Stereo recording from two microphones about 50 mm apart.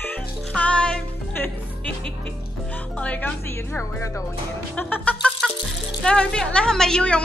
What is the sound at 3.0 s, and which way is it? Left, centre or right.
Music, left.